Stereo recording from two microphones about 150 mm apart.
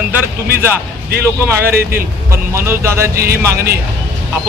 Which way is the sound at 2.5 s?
15° right (ahead or behind).